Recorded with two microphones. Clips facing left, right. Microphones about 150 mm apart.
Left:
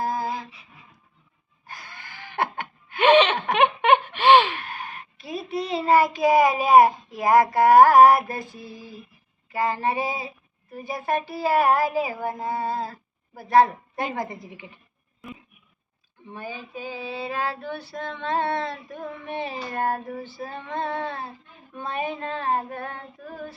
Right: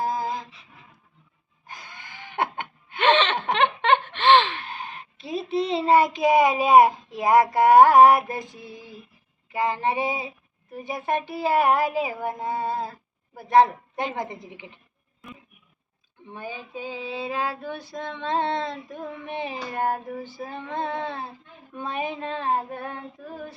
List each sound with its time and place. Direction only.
0.0 s a sound: 20° right (ahead or behind)
1.6 s gasp: 20° right (ahead or behind)
3.0 s laughter: 10° left (ahead or behind)
3.5 s a sound: 10° left (ahead or behind)
4.6 s a child's voice: 25° right (ahead or behind)
16.3 s female singing: 20° right (ahead or behind)